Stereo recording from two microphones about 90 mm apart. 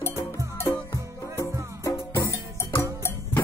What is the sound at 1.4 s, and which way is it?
Music, 30° left (ahead or behind).